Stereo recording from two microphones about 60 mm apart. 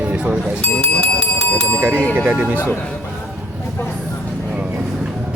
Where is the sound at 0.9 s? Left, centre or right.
Centre.